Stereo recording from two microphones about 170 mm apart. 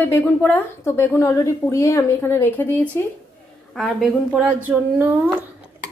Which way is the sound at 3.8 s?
Centre (ahead or behind).